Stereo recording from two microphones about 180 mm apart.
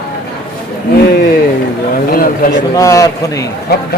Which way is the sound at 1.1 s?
60° left (ahead or behind).